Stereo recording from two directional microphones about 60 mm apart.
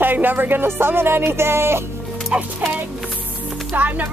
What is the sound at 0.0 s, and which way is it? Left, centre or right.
Speech, right.